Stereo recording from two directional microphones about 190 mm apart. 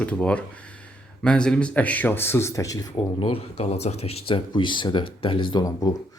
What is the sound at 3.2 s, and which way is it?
Speech, 30° left (ahead or behind).